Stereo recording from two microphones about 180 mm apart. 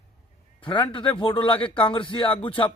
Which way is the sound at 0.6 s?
25° left (ahead or behind).